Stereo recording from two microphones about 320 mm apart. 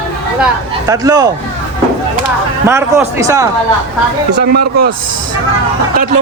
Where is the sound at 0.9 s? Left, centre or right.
Centre.